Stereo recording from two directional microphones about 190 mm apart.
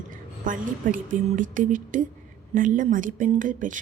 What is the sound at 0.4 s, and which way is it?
A woman's voice, 45° right (ahead or behind).